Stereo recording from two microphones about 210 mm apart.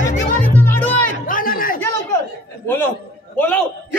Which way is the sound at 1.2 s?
40° left (ahead or behind).